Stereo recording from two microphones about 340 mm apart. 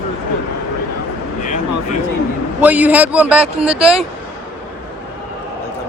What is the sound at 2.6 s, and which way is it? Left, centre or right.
A man's voice, centre.